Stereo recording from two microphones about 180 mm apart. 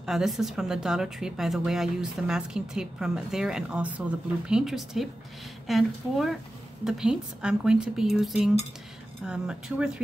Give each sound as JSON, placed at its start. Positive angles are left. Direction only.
{"t": 0.0, "sound": "speech", "side_deg": 0}